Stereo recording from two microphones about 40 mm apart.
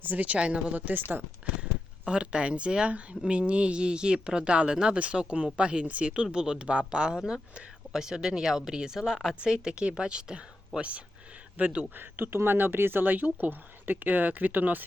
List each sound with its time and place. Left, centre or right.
0.0 s speech: right
0.3 s a woman's voice: right
0.9 s speech: right
1.4 s a sound: right
2.0 s speech: right
6.3 s speech: right
10.8 s a woman's voice: right
11.9 s speech: right